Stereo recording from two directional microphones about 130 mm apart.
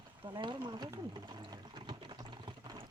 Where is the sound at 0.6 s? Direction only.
35° right (ahead or behind).